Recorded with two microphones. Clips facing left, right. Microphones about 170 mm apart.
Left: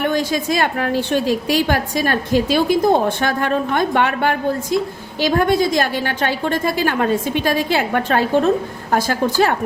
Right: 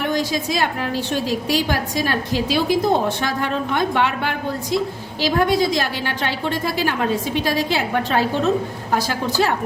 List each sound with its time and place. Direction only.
0.1 s a woman's voice: 55° left (ahead or behind)